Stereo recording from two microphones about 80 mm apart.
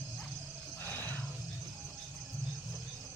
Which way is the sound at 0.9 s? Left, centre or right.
Left.